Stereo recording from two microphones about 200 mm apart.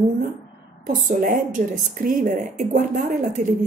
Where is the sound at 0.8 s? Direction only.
40° right (ahead or behind).